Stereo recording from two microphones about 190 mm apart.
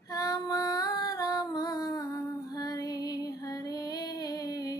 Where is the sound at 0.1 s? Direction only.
20° left (ahead or behind).